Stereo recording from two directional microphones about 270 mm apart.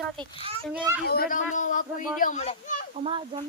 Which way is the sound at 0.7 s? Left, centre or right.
Centre.